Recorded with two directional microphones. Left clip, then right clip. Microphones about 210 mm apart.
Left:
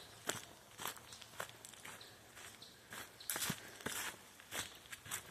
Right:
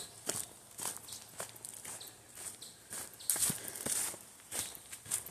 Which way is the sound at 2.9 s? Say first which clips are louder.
Right 4 dB; 15° right (ahead or behind).